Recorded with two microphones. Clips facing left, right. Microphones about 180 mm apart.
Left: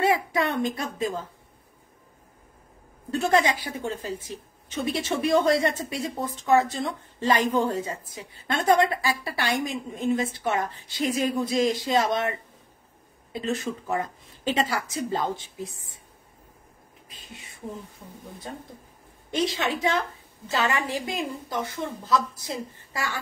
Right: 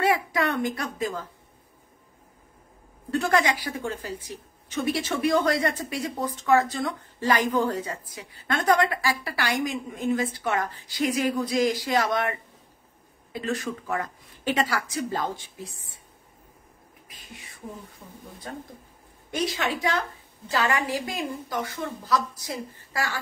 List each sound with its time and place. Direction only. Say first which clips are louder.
0.0 s speech: left 1 dB; 25° left (ahead or behind)
3.1 s speech: left 1 dB; 25° left (ahead or behind)
19.3 s speech: left 1 dB; 25° left (ahead or behind)